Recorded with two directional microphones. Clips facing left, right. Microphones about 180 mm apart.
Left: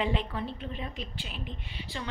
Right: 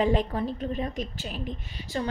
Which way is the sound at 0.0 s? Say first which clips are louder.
Right 6 dB; 40° right (ahead or behind).